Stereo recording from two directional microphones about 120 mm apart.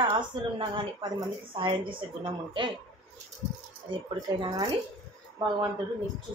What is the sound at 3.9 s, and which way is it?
A woman's voice, 45° right (ahead or behind).